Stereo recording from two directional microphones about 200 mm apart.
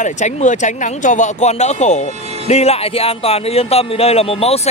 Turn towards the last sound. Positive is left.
turn(degrees=30)  # may be behind; listen again after turning